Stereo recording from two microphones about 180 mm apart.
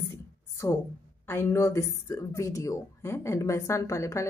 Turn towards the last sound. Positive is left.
turn(degrees=15)  # may be behind; listen again after turning